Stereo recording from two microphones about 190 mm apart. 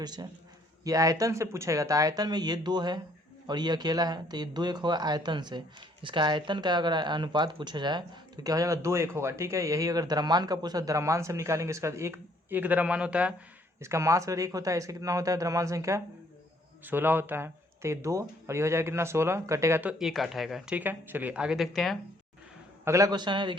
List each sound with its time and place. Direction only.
0.0 s speech: 20° right (ahead or behind); by 21.9 s centre (ahead or behind)
22.8 s speech: 15° right (ahead or behind)